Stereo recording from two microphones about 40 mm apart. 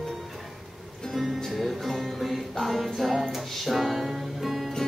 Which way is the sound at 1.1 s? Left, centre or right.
Centre.